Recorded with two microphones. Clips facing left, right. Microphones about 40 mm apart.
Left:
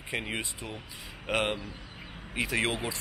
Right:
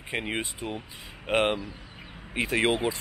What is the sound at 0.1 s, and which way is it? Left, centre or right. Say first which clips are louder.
Speech: right 3 dB; right.